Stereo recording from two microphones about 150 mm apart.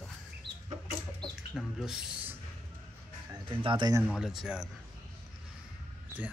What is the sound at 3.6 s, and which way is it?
Speech, 35° right (ahead or behind).